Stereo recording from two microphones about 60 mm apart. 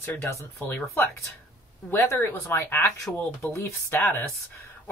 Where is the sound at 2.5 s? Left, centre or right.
Left.